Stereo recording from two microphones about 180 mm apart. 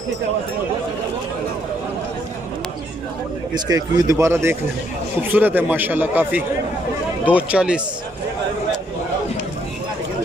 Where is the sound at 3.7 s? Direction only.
15° right (ahead or behind).